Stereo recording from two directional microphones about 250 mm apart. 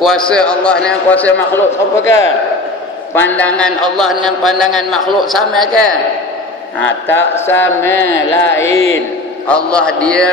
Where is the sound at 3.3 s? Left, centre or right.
Centre.